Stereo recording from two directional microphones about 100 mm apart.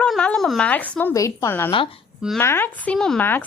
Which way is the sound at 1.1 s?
30° left (ahead or behind).